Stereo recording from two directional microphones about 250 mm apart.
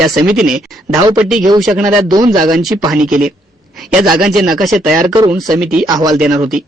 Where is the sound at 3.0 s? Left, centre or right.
Right.